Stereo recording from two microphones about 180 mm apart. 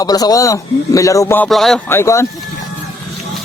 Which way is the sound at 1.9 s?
15° left (ahead or behind).